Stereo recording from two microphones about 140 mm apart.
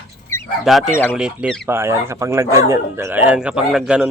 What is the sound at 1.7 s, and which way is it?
Speech, 20° right (ahead or behind).